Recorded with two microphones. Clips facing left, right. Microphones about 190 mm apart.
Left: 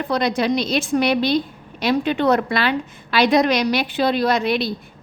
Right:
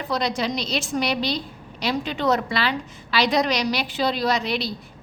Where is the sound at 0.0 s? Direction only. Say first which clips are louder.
Left 5 dB; 55° left (ahead or behind).